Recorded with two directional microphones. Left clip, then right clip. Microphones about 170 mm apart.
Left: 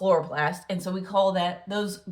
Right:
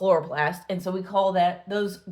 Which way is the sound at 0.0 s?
25° right (ahead or behind).